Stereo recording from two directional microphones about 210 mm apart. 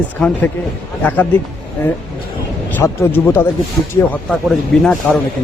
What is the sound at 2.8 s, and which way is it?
Speech, 10° left (ahead or behind).